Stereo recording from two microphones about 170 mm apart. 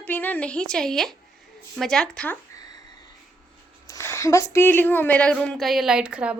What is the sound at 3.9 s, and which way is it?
A woman's voice, 15° left (ahead or behind).